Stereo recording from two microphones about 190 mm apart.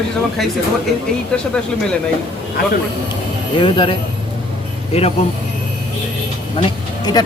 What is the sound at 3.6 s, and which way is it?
Speech, 25° left (ahead or behind).